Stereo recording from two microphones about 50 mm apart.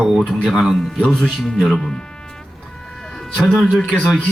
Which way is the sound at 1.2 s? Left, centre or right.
Centre.